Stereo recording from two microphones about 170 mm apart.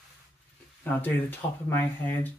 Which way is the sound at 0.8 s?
10° left (ahead or behind).